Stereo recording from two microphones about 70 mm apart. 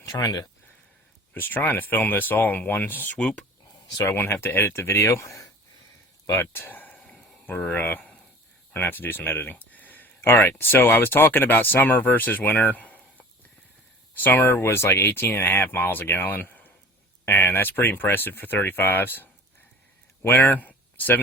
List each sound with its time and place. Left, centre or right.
0.0 s speech: left
1.3 s speech: left
3.2 s speech: centre
3.9 s speech: left
6.3 s speech: left
7.0 s a sound: centre
7.4 s speech: left